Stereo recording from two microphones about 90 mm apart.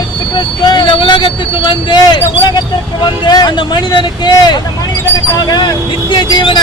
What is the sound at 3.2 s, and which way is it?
Speech, 55° left (ahead or behind).